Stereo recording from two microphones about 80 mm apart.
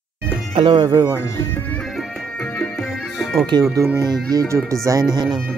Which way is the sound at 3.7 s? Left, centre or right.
Right.